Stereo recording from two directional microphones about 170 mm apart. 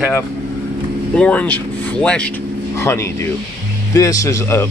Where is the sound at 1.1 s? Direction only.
5° left (ahead or behind).